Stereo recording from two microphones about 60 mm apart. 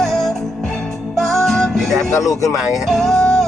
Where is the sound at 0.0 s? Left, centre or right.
Centre.